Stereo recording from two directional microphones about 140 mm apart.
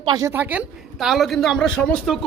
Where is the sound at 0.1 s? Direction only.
25° right (ahead or behind).